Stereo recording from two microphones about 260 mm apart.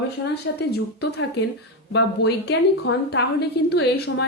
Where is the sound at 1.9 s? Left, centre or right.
Left.